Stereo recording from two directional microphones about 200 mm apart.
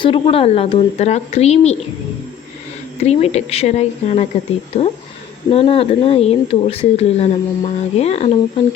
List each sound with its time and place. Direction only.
0.0 s a woman's voice: 25° left (ahead or behind)
3.0 s a woman's voice: 30° left (ahead or behind)